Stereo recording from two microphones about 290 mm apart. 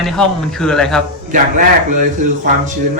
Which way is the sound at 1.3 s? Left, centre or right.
Right.